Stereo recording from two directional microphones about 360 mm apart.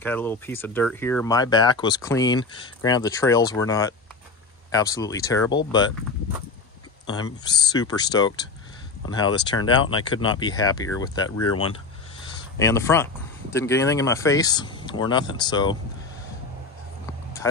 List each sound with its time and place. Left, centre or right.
0.0 s speech: centre
7.1 s speech: centre
11.2 s speech: left
12.5 s speech: centre